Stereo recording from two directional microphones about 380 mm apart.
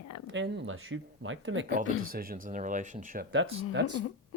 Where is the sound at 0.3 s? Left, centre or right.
Right.